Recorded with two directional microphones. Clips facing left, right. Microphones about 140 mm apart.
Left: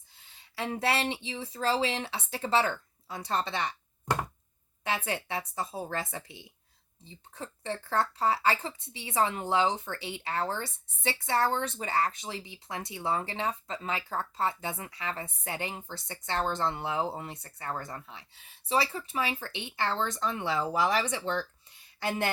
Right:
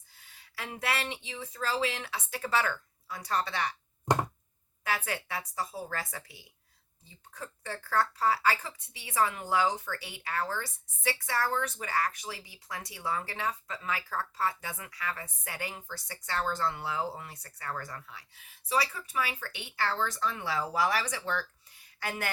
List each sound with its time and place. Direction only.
0.1 s speech: 25° left (ahead or behind)
4.8 s speech: 25° left (ahead or behind)